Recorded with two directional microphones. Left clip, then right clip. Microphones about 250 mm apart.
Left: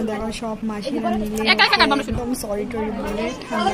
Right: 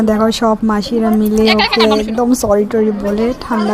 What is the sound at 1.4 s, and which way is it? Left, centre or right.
Speech, centre.